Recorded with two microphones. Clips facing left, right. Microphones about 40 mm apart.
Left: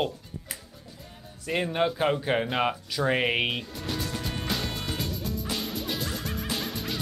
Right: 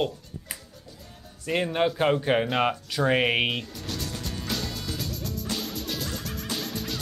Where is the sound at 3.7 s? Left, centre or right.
Centre.